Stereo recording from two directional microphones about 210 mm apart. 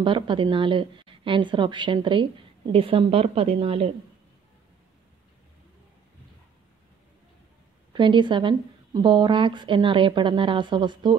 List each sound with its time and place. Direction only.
0.0 s a woman's voice: 25° right (ahead or behind)
7.9 s a woman's voice: 20° right (ahead or behind)